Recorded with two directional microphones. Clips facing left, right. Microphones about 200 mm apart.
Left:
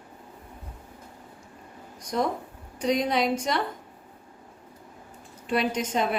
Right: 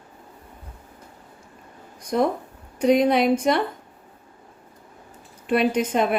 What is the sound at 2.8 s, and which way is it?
Speech, 60° right (ahead or behind).